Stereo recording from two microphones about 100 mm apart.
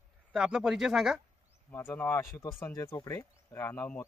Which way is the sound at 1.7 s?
20° left (ahead or behind).